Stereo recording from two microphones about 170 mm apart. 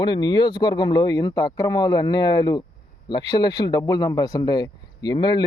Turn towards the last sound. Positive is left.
turn(degrees=25)  # may be behind; listen again after turning